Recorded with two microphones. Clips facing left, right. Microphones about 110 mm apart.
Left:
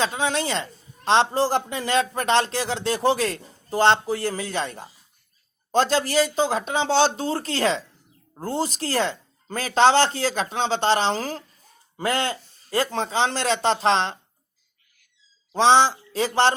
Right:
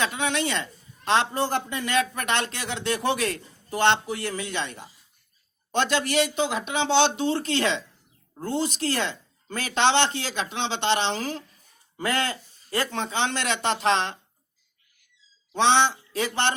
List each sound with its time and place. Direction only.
0.0 s a man's voice: 30° left (ahead or behind)
15.5 s a man's voice: 30° left (ahead or behind)